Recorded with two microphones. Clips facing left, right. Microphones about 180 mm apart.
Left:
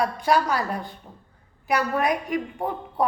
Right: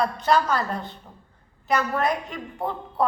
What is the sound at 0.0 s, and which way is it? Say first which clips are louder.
A woman's voice: even; 10° left (ahead or behind).